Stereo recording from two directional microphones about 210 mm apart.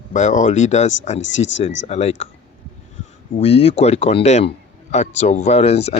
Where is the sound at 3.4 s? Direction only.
30° left (ahead or behind).